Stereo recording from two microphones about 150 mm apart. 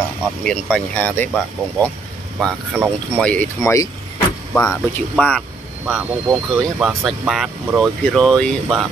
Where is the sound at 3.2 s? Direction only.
10° left (ahead or behind).